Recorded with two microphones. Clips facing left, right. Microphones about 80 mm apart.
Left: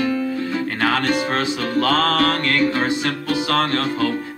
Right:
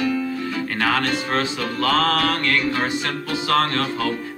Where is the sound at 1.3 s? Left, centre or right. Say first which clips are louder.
Left 3 dB; left.